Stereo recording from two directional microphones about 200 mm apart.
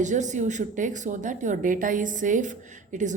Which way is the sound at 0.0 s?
35° right (ahead or behind).